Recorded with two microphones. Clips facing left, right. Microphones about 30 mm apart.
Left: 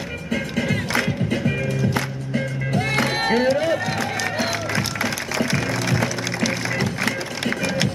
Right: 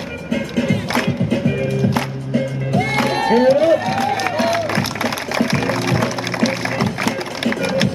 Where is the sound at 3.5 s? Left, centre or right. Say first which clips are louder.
Right 7 dB; centre.